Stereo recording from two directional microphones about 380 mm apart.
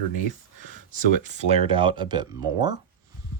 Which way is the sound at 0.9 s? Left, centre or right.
Centre.